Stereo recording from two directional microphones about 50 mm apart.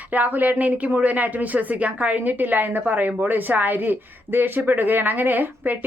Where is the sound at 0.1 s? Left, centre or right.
Right.